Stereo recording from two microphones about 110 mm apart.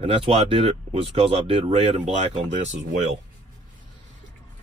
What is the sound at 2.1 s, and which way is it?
Speech, 90° right.